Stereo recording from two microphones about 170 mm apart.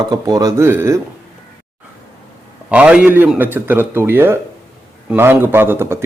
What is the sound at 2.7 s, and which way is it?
Speech, 5° right (ahead or behind).